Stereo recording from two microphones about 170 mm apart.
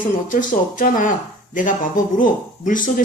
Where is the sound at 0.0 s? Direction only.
50° left (ahead or behind).